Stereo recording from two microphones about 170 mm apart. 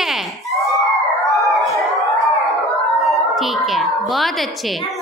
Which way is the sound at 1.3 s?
20° left (ahead or behind).